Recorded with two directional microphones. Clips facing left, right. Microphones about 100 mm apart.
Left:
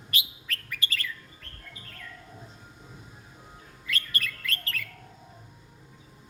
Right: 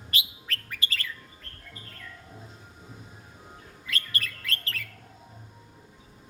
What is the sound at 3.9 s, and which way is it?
Bird, 30° right (ahead or behind).